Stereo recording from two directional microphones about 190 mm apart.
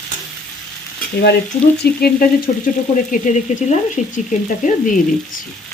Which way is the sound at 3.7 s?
40° left (ahead or behind).